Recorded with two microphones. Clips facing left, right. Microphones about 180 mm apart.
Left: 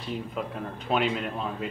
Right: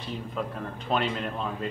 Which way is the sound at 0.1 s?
5° left (ahead or behind).